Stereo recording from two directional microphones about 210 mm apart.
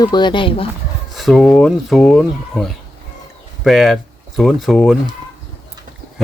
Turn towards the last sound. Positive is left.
turn(degrees=0)  # may be behind; listen again after turning